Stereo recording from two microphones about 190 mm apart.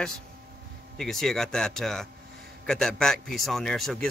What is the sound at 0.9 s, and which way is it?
Speech, centre (ahead or behind).